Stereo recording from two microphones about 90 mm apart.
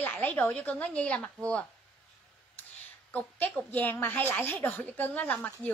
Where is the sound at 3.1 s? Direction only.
15° left (ahead or behind).